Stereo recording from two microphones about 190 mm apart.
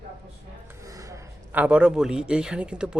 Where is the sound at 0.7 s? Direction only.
15° right (ahead or behind).